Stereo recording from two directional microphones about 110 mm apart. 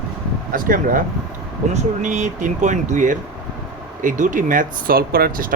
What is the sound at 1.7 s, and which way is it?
Speech, 90° right.